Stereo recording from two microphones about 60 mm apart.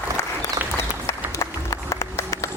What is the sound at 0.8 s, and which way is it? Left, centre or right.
Applause, left.